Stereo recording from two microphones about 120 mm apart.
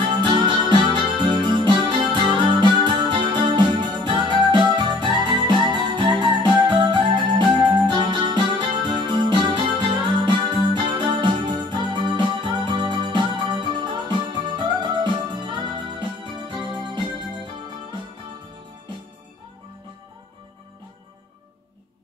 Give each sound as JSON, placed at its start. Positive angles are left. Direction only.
{"t": 0.0, "sound": "music", "side_deg": -40}